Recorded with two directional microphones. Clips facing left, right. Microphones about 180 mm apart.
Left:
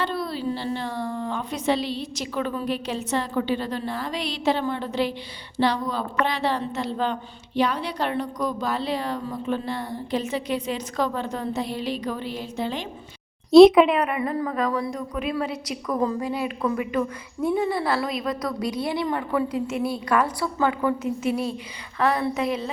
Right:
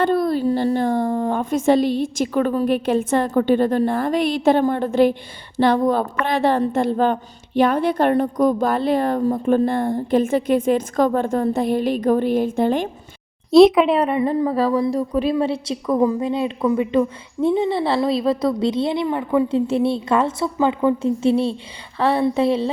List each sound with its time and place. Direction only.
0.0 s a woman's voice: 50° right (ahead or behind)
13.5 s speech: centre (ahead or behind)
13.9 s a woman's voice: 30° right (ahead or behind)